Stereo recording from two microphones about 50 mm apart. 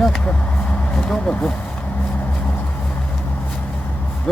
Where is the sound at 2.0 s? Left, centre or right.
Left.